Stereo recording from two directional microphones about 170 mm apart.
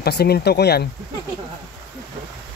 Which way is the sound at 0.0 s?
70° left (ahead or behind).